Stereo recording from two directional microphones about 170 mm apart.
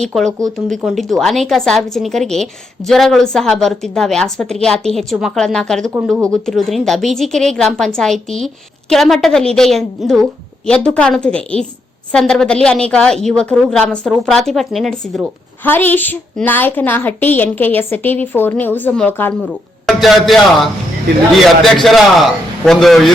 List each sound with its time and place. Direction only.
0.0 s a woman's voice: centre (ahead or behind)
0.3 s speech: 20° right (ahead or behind)
0.8 s a woman's voice: centre (ahead or behind)
15.6 s a woman's voice: 10° left (ahead or behind)
19.9 s a woman's voice: centre (ahead or behind)